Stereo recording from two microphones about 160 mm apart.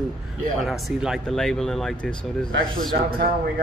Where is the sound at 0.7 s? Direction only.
Centre (ahead or behind).